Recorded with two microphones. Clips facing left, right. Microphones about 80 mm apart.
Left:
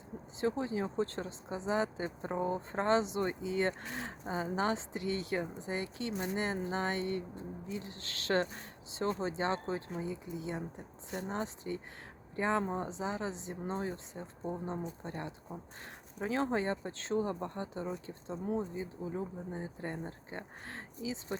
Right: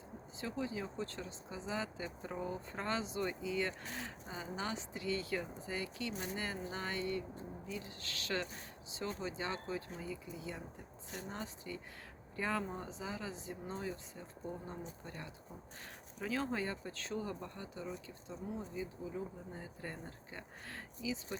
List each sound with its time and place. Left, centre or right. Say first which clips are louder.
0.3 s speech: left 7 dB; left
12.6 s speech: left 8 dB; left
12.9 s speech: left 7 dB; left
13.7 s speech: left 6 dB; left